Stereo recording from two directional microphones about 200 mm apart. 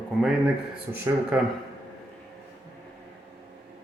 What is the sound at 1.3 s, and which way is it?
Speech, 5° right (ahead or behind).